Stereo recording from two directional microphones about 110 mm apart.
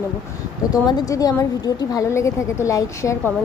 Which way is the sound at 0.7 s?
35° left (ahead or behind).